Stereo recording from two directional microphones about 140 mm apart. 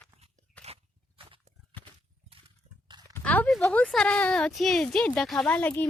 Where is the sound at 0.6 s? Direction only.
45° right (ahead or behind).